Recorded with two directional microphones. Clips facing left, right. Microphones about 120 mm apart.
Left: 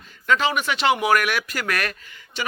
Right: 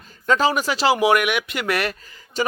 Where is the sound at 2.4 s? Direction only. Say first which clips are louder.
Right 5 dB; 40° right (ahead or behind).